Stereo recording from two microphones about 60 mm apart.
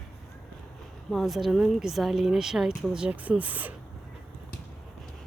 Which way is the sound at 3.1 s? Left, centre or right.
Right.